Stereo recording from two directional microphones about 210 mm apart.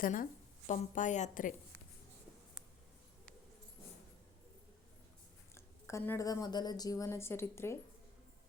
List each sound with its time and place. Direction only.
0.0 s a woman's voice: 40° left (ahead or behind)
5.5 s a woman's voice: 10° left (ahead or behind)